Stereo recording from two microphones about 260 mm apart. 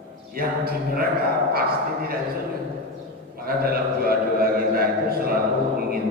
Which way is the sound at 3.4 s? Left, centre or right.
Right.